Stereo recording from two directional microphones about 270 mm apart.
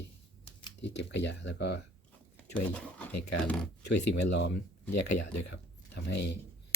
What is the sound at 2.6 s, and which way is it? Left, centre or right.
Speech, centre.